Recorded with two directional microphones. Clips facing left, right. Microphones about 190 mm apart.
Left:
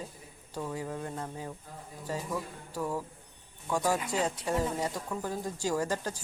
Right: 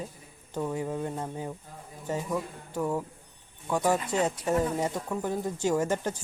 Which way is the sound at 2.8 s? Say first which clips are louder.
Right 4 dB; 20° right (ahead or behind).